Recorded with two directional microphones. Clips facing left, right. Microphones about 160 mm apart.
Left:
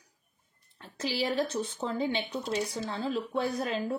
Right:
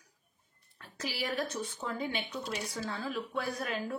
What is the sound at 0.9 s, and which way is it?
Speech, 25° left (ahead or behind).